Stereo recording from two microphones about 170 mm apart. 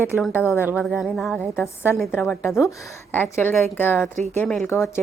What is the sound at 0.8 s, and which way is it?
A woman's voice, centre (ahead or behind).